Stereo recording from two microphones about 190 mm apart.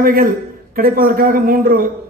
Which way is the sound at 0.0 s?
50° right (ahead or behind).